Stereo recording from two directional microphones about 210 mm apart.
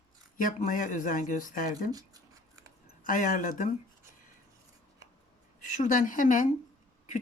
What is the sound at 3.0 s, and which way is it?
Speech, 40° left (ahead or behind).